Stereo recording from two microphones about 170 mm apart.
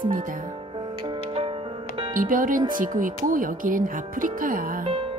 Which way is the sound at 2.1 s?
50° right (ahead or behind).